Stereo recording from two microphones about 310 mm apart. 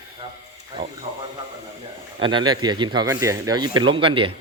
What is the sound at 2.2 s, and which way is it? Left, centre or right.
Speech, centre.